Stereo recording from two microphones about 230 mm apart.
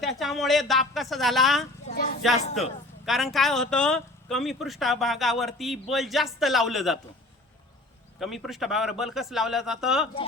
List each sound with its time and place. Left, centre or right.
0.0 s speech: centre
1.9 s a sound: left
3.1 s speech: centre
8.2 s speech: centre